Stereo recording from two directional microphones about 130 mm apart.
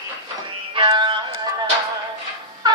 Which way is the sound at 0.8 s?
35° right (ahead or behind).